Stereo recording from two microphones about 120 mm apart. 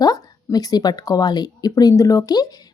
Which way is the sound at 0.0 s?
35° left (ahead or behind).